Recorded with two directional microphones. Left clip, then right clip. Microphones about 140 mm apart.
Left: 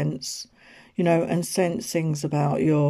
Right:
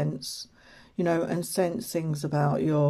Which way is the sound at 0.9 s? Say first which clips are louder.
Left 5 dB; 20° left (ahead or behind).